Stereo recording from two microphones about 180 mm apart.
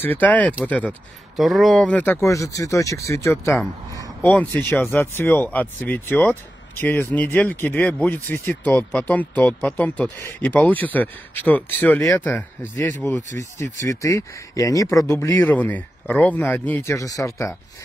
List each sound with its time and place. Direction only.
0.0 s speech: 10° left (ahead or behind)